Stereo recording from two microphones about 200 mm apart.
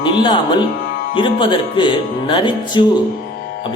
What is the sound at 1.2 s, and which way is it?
Speech, 25° left (ahead or behind).